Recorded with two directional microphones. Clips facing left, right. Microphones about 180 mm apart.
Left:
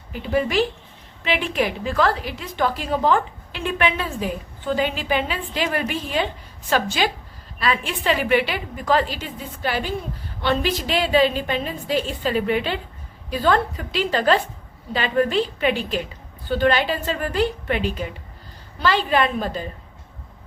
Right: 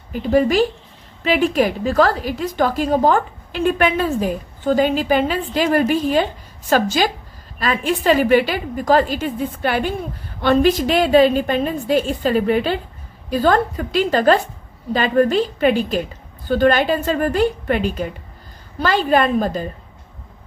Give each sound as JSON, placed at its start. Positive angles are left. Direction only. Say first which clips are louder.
{"t": 0.1, "sound": "a woman's voice", "louder": "right 6 dB", "side_deg": -45}